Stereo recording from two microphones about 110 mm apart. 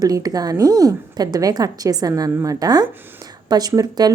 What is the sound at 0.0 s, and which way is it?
A woman's voice, 35° right (ahead or behind).